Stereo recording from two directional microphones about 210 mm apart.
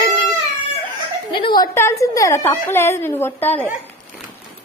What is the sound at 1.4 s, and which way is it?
A woman's voice, 20° left (ahead or behind).